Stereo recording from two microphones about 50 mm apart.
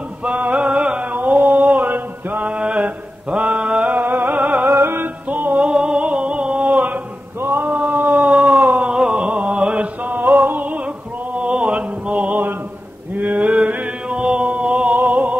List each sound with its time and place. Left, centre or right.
0.2 s music: right
1.1 s a sound: right
1.9 s mantra: right
2.5 s mantra: right
4.0 s music: right
4.6 s music: right
5.5 s a sound: right
8.9 s mantra: centre
10.0 s music: right
11.3 s music: right
13.1 s mantra: right
14.1 s chant: right
14.9 s music: right